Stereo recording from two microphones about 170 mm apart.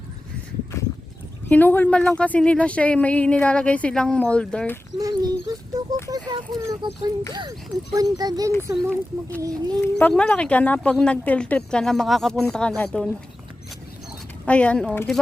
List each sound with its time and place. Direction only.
1.5 s speech: 10° left (ahead or behind)
4.9 s speech: 20° right (ahead or behind)
8.7 s speech: 5° left (ahead or behind)
9.4 s speech: 20° right (ahead or behind)
9.8 s speech: 10° left (ahead or behind)
14.4 s speech: 5° left (ahead or behind)